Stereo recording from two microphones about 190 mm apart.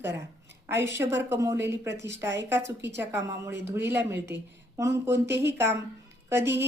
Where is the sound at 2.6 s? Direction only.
65° right (ahead or behind).